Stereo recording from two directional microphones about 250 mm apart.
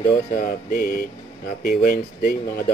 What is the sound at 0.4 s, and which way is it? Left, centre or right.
Speech, left.